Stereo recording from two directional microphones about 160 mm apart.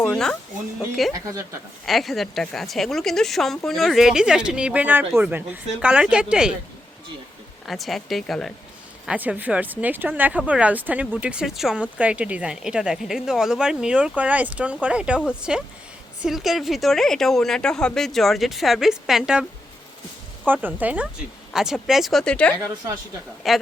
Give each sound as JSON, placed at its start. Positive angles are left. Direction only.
{"t": 0.0, "sound": "speech", "side_deg": 5}
{"t": 1.1, "sound": "a woman's voice", "side_deg": -20}
{"t": 1.8, "sound": "a woman's voice", "side_deg": 0}
{"t": 7.7, "sound": "a woman's voice", "side_deg": 0}